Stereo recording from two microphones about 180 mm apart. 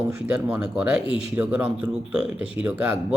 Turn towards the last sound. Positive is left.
turn(degrees=-5)  # may be behind; listen again after turning